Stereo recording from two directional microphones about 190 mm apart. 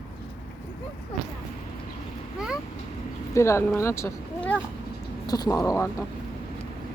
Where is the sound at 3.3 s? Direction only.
15° left (ahead or behind).